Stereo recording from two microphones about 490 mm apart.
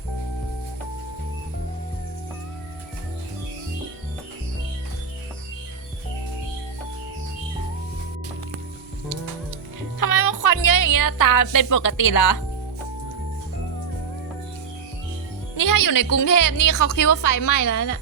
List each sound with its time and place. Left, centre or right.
10.0 s a woman's voice: left
15.5 s a woman's voice: left